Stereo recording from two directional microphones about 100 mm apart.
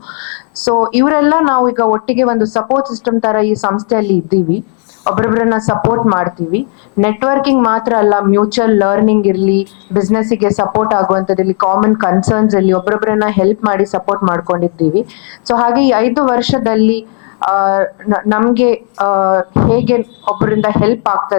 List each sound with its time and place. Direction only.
0.7 s speech: 15° left (ahead or behind)
5.0 s speech: 15° left (ahead or behind)